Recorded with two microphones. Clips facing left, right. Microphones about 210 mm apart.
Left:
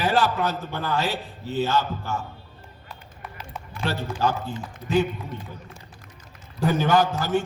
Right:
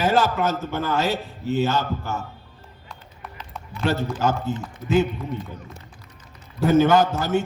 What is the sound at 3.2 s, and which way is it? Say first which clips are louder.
Run: left 1 dB; centre (ahead or behind).